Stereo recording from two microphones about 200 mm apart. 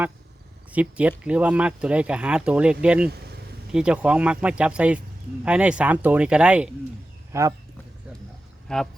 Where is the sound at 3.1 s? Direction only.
50° right (ahead or behind).